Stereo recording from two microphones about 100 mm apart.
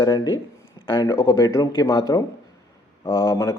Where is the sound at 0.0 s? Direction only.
40° left (ahead or behind).